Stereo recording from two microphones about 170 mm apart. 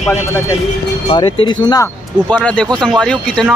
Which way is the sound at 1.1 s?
30° left (ahead or behind).